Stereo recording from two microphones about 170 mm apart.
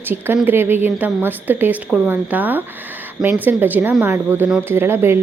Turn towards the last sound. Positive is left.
turn(degrees=-15)  # may be behind; listen again after turning